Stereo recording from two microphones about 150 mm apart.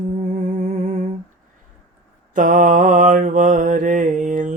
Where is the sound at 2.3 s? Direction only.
60° right (ahead or behind).